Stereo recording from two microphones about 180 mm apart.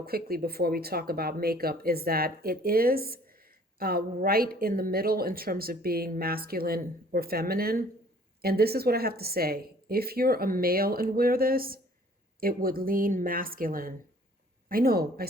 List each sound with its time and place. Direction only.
0.0 s speech: 55° right (ahead or behind)